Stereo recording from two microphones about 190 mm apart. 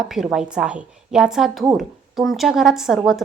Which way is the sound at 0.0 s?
Centre (ahead or behind).